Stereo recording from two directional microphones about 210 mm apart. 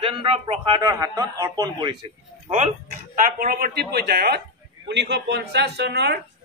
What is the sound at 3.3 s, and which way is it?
A woman's voice, 45° right (ahead or behind).